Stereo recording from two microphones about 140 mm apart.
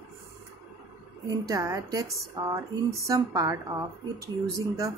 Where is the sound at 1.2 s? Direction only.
25° right (ahead or behind).